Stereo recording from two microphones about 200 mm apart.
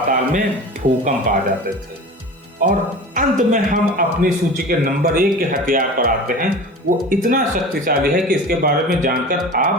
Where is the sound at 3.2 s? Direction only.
40° right (ahead or behind).